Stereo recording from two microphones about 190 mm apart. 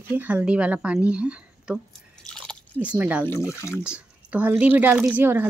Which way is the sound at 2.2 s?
5° left (ahead or behind).